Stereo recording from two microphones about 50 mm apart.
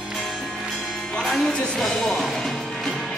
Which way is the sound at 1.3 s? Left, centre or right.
Centre.